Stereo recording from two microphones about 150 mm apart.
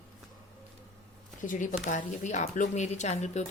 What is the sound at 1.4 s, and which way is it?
Speech, 60° left (ahead or behind).